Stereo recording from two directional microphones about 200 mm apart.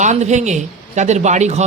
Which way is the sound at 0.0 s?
35° right (ahead or behind).